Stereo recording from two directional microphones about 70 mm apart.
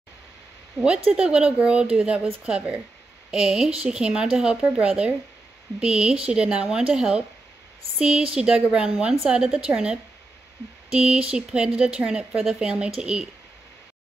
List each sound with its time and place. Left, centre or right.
0.7 s a woman's voice: centre